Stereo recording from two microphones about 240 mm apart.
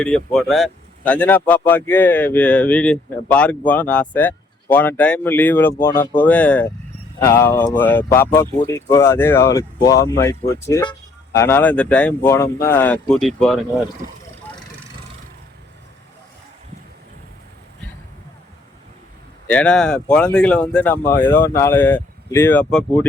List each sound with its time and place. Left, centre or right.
0.0 s speech: centre
19.5 s speech: centre